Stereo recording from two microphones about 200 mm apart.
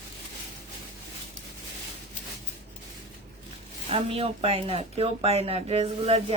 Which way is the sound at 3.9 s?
30° right (ahead or behind).